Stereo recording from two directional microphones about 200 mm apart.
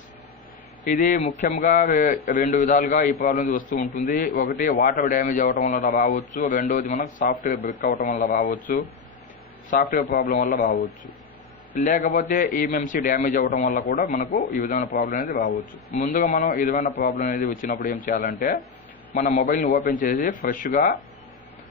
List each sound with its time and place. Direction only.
0.8 s a man's voice: 40° left (ahead or behind)
9.7 s a man's voice: 45° left (ahead or behind)
10.6 s speech: 60° left (ahead or behind)
11.8 s a man's voice: 40° left (ahead or behind)